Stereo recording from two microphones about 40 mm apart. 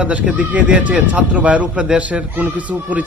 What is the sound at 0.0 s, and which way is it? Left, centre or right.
A man's voice, right.